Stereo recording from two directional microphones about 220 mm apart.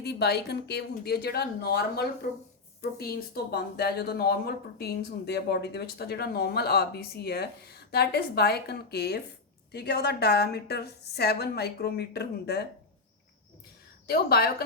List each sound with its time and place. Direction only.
0.0 s speech: 45° left (ahead or behind)
14.1 s speech: 45° left (ahead or behind)